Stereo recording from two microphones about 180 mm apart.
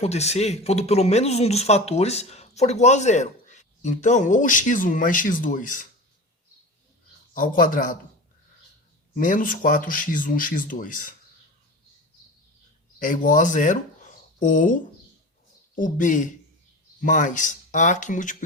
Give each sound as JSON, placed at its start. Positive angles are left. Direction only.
{"t": 0.0, "sound": "speech", "side_deg": 35}
{"t": 7.3, "sound": "speech", "side_deg": 50}
{"t": 9.1, "sound": "speech", "side_deg": 50}
{"t": 13.0, "sound": "speech", "side_deg": 50}